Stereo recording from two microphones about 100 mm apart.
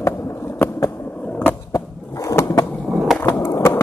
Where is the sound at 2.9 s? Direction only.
Centre (ahead or behind).